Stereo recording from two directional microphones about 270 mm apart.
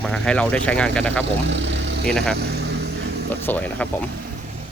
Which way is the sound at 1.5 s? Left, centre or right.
Right.